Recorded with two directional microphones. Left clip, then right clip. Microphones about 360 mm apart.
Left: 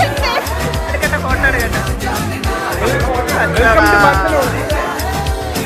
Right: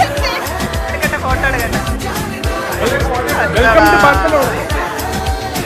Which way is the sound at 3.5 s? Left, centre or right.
Centre.